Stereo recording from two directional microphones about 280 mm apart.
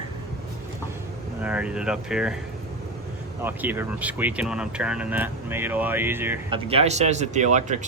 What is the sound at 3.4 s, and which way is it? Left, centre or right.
Speech, centre.